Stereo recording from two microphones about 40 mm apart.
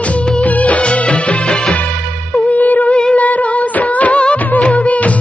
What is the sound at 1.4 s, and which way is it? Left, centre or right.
Music, centre.